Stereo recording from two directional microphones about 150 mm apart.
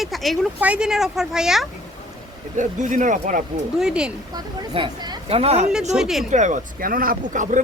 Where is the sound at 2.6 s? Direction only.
55° right (ahead or behind).